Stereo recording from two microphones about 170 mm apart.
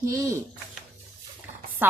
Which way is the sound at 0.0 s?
20° right (ahead or behind).